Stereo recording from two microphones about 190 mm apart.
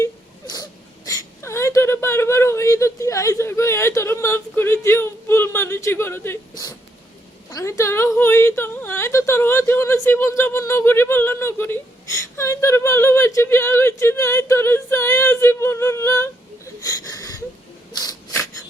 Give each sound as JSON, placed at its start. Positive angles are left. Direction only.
{"t": 0.5, "sound": "whimper", "side_deg": 20}
{"t": 7.5, "sound": "a woman's voice", "side_deg": 15}
{"t": 16.8, "sound": "wheeze", "side_deg": 20}
{"t": 17.9, "sound": "a sound", "side_deg": 20}